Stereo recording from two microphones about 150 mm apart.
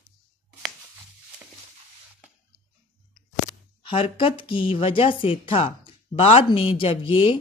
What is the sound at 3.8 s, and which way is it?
Speech, 35° left (ahead or behind).